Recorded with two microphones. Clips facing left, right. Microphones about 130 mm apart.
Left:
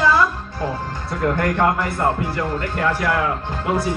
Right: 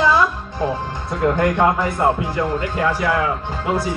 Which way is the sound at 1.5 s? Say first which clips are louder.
Right 2 dB; 10° right (ahead or behind).